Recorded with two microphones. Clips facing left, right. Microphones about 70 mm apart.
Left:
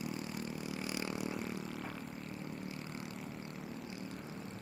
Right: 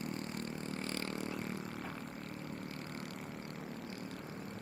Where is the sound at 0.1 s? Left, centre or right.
Right.